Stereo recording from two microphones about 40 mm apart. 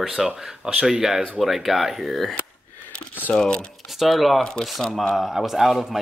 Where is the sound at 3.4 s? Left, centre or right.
Centre.